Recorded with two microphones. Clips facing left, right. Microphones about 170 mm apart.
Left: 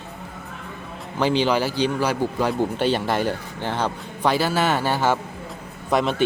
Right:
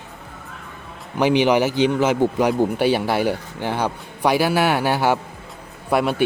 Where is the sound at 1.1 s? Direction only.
15° right (ahead or behind).